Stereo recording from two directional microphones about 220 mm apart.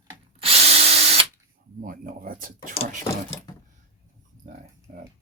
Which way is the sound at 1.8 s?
40° right (ahead or behind).